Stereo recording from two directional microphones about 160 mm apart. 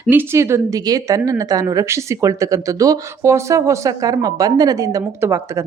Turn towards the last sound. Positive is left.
turn(degrees=-15)  # may be behind; listen again after turning